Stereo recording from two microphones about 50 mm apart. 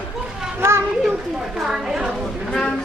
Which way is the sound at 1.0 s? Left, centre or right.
Centre.